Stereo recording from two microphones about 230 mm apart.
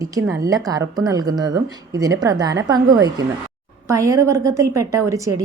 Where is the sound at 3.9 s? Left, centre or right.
Centre.